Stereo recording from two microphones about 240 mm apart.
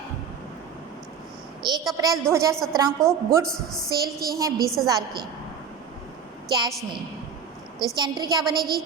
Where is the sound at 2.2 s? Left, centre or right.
Centre.